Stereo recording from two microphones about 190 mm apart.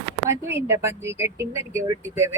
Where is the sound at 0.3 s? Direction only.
15° right (ahead or behind).